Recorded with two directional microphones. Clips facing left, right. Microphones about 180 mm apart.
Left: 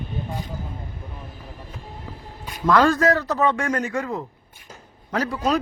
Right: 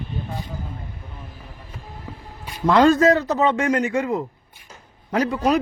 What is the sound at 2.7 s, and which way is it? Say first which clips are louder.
A man's voice: right 3 dB; 20° right (ahead or behind).